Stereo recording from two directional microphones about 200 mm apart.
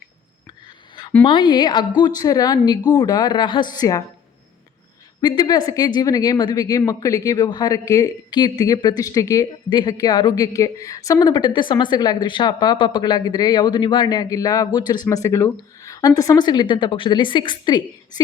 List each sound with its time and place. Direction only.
1.2 s speech: 25° left (ahead or behind)
5.2 s speech: 20° left (ahead or behind)